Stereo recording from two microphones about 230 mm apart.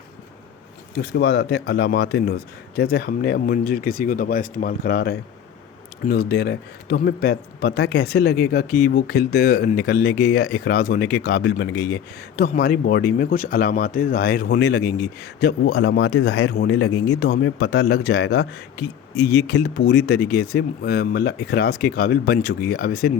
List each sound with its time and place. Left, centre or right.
0.9 s speech: left